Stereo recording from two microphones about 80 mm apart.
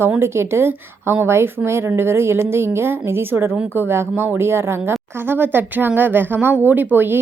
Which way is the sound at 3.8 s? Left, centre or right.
Right.